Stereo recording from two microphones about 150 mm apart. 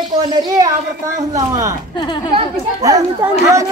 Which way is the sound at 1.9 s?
30° left (ahead or behind).